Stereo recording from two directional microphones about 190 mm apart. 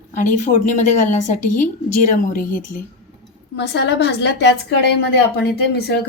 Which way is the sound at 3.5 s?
65° left (ahead or behind).